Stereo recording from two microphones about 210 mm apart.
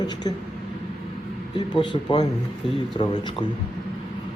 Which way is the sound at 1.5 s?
20° left (ahead or behind).